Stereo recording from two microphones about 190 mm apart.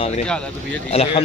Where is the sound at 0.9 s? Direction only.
30° left (ahead or behind).